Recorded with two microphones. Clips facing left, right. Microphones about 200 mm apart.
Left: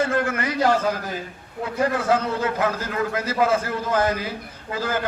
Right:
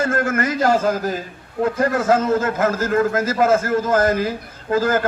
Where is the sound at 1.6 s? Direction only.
45° right (ahead or behind).